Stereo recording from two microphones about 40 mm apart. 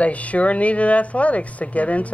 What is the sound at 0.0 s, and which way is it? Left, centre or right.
A man's voice, left.